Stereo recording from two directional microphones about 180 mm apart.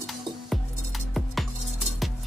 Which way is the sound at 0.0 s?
Centre (ahead or behind).